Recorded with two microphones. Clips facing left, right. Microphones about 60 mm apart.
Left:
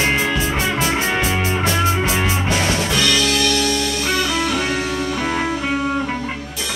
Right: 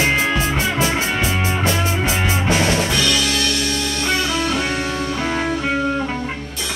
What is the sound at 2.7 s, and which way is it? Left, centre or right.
Music, centre.